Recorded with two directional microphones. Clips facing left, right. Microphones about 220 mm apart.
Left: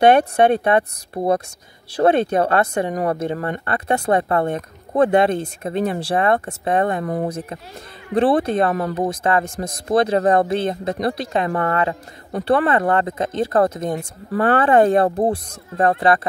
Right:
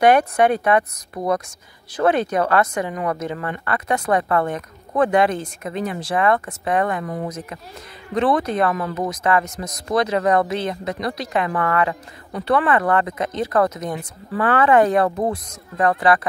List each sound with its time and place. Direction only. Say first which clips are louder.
0.0 s a woman's voice: left 2 dB; 25° left (ahead or behind)
13.9 s speech: left 3 dB; 45° left (ahead or behind)
14.5 s speech: left 1 dB; 30° left (ahead or behind)